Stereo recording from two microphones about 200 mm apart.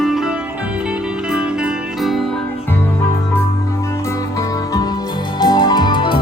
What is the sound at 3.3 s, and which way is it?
Music, 15° left (ahead or behind).